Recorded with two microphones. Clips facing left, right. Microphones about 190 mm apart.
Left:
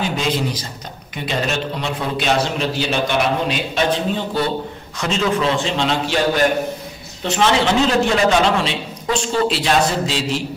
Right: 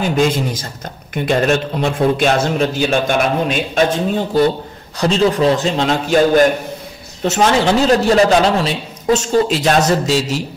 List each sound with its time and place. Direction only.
0.0 s a man's voice: 50° right (ahead or behind)
4.9 s a man's voice: 35° right (ahead or behind)